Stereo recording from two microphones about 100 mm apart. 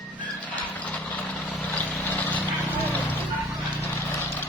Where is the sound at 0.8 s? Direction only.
15° left (ahead or behind).